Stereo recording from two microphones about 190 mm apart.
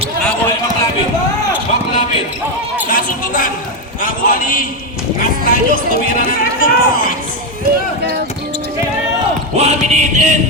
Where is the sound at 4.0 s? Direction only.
45° left (ahead or behind).